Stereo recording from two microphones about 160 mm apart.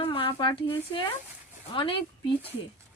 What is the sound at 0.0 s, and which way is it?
Speech, 35° left (ahead or behind).